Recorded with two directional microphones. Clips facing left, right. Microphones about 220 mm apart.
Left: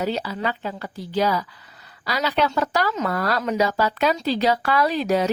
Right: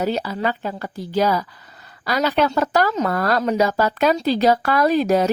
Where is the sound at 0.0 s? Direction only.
45° right (ahead or behind).